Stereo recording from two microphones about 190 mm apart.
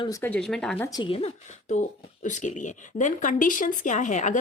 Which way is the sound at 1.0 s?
30° left (ahead or behind).